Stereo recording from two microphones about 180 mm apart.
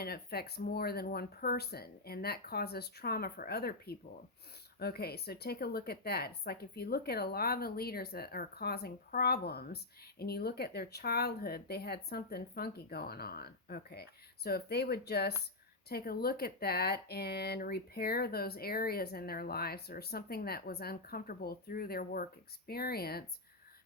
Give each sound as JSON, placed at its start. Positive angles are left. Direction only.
{"t": 0.0, "sound": "speech", "side_deg": 60}